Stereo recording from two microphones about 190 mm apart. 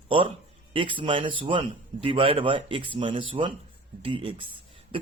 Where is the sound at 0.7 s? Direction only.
25° right (ahead or behind).